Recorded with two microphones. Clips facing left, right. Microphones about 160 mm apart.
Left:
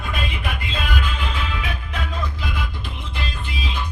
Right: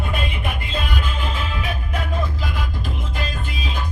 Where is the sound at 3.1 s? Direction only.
45° right (ahead or behind).